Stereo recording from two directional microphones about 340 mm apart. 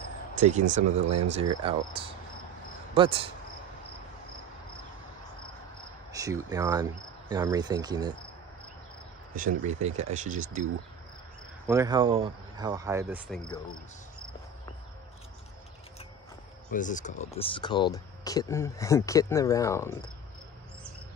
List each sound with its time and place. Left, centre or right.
0.4 s speech: right
6.1 s speech: centre
9.6 s speech: right
11.6 s speech: centre
16.7 s speech: left